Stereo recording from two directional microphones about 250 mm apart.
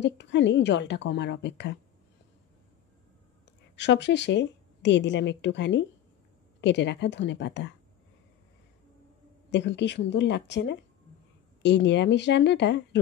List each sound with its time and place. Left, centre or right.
0.0 s a woman's voice: left
3.7 s a woman's voice: left
9.5 s a woman's voice: left